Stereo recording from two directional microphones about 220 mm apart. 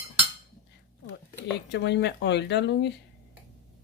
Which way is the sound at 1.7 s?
50° left (ahead or behind).